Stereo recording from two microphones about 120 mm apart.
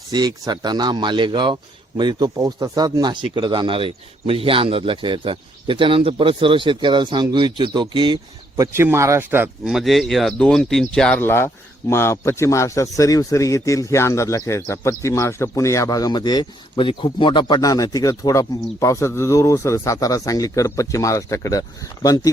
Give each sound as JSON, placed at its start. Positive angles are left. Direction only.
{"t": 0.1, "sound": "speech", "side_deg": -35}
{"t": 8.5, "sound": "speech", "side_deg": -25}
{"t": 9.6, "sound": "speech", "side_deg": 0}
{"t": 11.2, "sound": "speech", "side_deg": 20}